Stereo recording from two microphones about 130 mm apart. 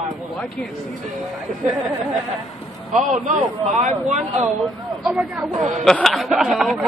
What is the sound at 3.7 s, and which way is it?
Speech, 65° right (ahead or behind).